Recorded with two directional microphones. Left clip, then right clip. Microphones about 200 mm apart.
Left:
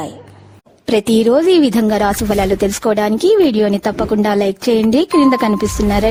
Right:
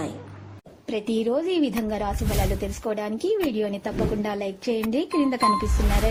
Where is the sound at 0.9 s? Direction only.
65° left (ahead or behind).